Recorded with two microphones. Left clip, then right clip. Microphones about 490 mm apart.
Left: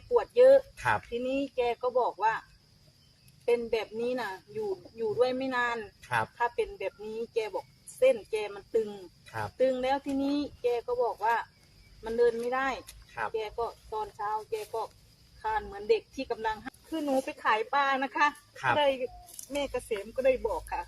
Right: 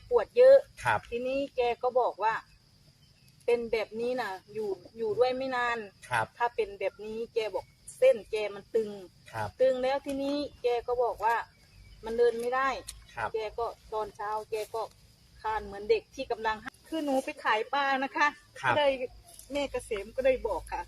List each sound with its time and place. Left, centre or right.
0.1 s speech: left
3.4 s speech: left
6.4 s speech: left
9.2 s speech: left
9.6 s speech: left
13.1 s a sound: left
13.4 s speech: left
15.4 s speech: left
18.5 s a woman's voice: left
19.5 s speech: left